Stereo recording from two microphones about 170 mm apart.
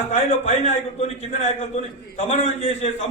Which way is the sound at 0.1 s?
40° left (ahead or behind).